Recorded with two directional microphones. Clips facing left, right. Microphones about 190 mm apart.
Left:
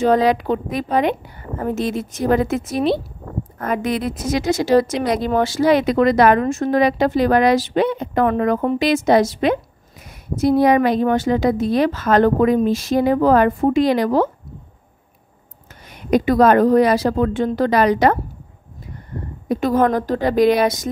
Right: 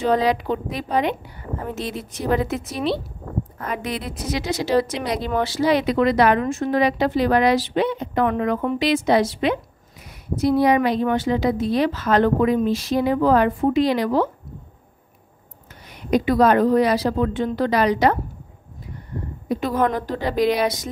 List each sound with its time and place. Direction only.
0.0 s speech: 50° left (ahead or behind)
16.1 s speech: 50° left (ahead or behind)
19.5 s speech: 45° left (ahead or behind)